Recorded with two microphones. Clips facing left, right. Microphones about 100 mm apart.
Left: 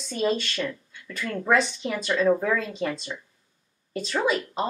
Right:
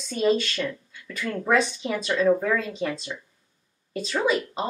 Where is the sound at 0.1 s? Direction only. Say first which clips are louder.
Right 3 dB; centre (ahead or behind).